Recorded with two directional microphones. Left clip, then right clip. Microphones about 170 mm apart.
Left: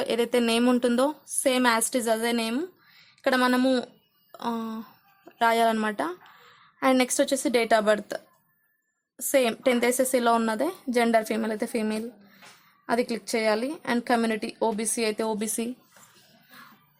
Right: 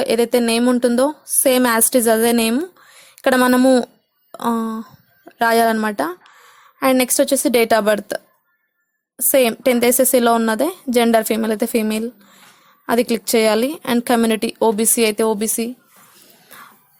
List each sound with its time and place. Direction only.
0.0 s a woman's voice: 25° right (ahead or behind)
1.4 s a woman's voice: 35° right (ahead or behind)